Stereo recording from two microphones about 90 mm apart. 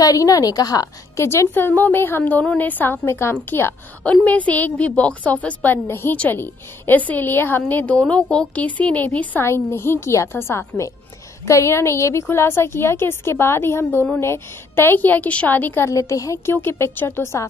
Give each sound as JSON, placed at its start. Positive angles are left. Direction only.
{"t": 0.0, "sound": "a woman's voice", "side_deg": 40}
{"t": 1.2, "sound": "a woman's voice", "side_deg": 30}
{"t": 4.0, "sound": "a woman's voice", "side_deg": 15}
{"t": 15.9, "sound": "a woman's voice", "side_deg": 35}